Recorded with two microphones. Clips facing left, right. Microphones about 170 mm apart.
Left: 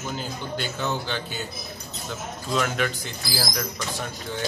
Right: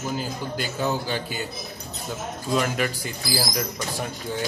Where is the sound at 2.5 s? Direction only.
5° right (ahead or behind).